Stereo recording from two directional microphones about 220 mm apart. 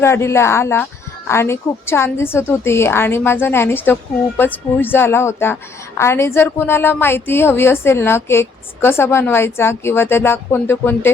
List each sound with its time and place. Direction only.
0.0 s a woman's voice: 10° left (ahead or behind)